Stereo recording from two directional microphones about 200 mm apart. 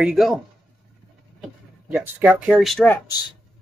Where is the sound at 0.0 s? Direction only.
Centre (ahead or behind).